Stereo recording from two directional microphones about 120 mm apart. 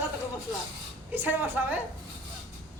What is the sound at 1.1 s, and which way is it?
Speech, 15° right (ahead or behind).